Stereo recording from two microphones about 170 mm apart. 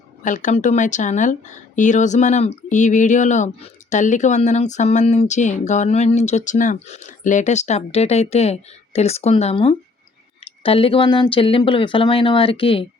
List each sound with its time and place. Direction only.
0.2 s speech: 50° left (ahead or behind); by 12.8 s 30° left (ahead or behind)